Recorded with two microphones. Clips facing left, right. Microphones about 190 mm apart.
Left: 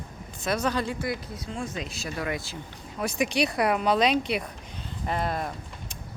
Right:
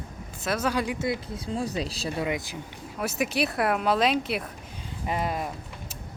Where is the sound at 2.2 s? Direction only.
15° right (ahead or behind).